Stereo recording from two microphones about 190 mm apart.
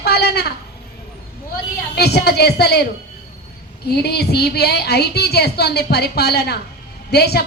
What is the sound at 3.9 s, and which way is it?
A woman's voice, 60° left (ahead or behind).